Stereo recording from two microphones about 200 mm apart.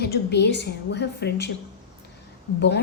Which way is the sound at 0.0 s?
55° left (ahead or behind).